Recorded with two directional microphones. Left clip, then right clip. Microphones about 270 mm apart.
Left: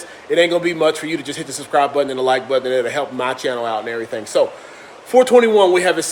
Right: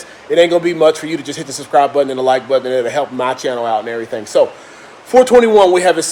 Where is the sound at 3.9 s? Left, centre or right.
Right.